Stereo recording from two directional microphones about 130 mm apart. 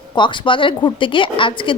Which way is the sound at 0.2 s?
40° left (ahead or behind).